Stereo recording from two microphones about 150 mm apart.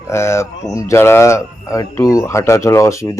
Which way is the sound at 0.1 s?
20° left (ahead or behind).